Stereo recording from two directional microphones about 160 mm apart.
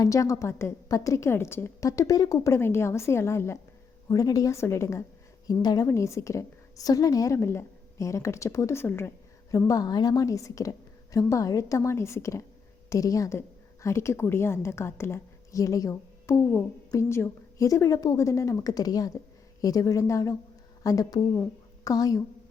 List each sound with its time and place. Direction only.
0.0 s a woman's voice: 20° left (ahead or behind)